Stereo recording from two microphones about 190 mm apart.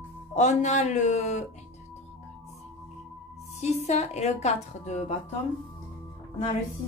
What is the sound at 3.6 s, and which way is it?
A woman's voice, 35° left (ahead or behind).